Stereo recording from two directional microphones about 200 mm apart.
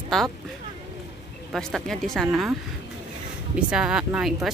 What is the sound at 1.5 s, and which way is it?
Speech, 5° left (ahead or behind).